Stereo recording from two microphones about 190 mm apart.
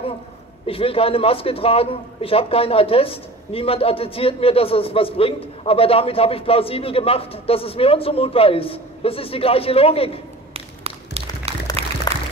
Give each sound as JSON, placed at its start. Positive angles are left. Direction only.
{"t": 0.7, "sound": "a man's voice", "side_deg": 30}
{"t": 10.5, "sound": "a sound", "side_deg": -30}
{"t": 11.8, "sound": "music", "side_deg": -30}